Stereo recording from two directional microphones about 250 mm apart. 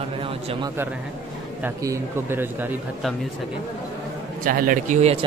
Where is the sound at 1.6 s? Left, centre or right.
Centre.